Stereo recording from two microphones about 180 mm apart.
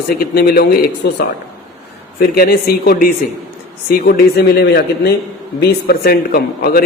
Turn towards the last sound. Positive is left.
turn(degrees=55)  # may be behind; listen again after turning